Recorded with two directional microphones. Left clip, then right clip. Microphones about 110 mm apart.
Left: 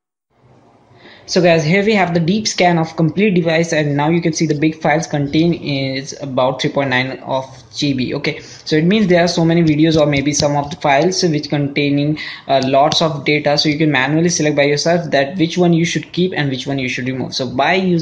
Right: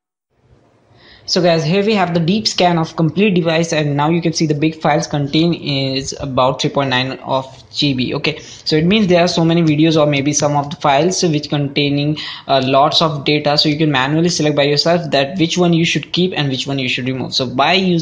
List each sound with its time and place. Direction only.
1.3 s a woman's voice: 15° right (ahead or behind)